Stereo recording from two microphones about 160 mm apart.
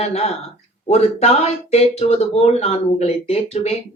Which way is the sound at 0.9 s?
40° left (ahead or behind).